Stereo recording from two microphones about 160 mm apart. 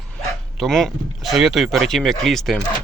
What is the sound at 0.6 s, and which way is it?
Speech, centre (ahead or behind).